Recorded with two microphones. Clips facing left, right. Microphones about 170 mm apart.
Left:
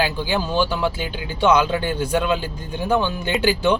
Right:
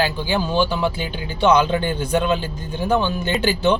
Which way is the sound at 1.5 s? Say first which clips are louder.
Right 1 dB; 10° left (ahead or behind).